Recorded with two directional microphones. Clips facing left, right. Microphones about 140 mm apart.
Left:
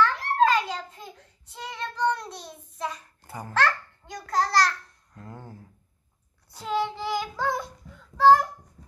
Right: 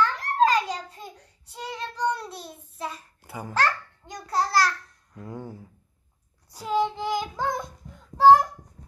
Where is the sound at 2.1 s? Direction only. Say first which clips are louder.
Even; 30° right (ahead or behind).